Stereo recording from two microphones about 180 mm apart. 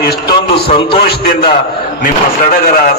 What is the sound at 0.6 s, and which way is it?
Speech, 30° left (ahead or behind).